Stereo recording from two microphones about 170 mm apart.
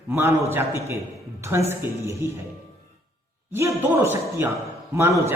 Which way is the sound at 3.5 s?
15° right (ahead or behind).